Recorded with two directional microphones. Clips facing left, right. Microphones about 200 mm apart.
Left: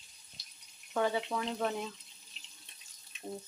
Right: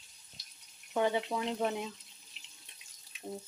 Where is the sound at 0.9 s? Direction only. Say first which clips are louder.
Right 1 dB; 20° right (ahead or behind).